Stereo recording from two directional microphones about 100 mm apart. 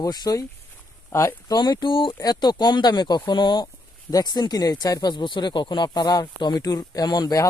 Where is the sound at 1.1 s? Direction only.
30° left (ahead or behind); by 2.1 s 55° left (ahead or behind).